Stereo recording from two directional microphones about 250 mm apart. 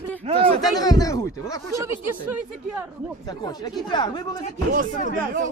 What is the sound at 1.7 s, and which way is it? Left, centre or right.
A woman's voice, centre.